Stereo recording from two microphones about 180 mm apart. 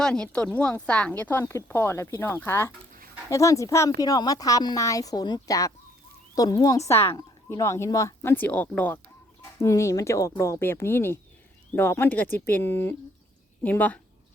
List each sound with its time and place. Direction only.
0.0 s a woman's voice: 5° left (ahead or behind)